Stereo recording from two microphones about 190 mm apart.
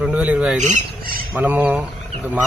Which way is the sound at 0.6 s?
40° right (ahead or behind).